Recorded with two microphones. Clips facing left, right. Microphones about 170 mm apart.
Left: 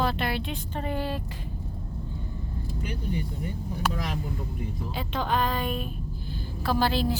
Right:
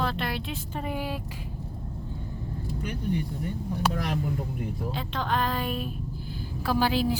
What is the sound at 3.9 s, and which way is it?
Speech, 60° right (ahead or behind).